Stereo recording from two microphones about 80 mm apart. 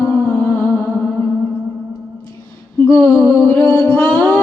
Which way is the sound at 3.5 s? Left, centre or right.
Left.